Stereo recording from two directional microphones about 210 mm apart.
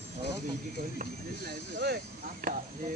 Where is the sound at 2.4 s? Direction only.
45° right (ahead or behind).